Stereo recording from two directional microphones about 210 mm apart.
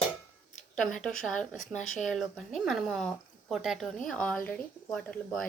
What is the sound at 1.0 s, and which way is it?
Speech, 5° left (ahead or behind).